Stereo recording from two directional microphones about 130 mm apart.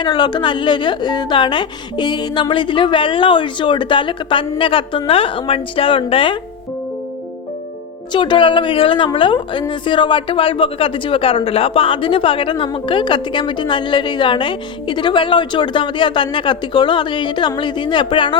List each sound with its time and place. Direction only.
0.0 s a woman's voice: 35° left (ahead or behind)
8.1 s a woman's voice: 40° left (ahead or behind)